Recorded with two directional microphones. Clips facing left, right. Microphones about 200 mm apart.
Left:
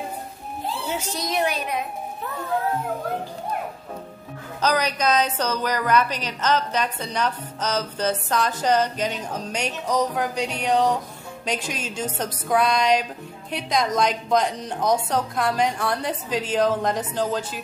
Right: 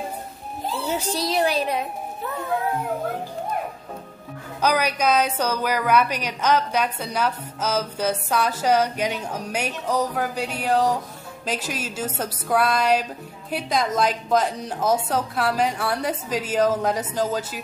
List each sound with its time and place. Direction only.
0.8 s speech: 35° right (ahead or behind)
4.6 s a woman's voice: 10° right (ahead or behind)